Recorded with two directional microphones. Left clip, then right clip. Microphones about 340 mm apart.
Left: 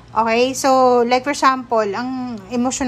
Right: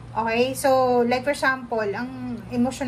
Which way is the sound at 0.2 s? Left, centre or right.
Centre.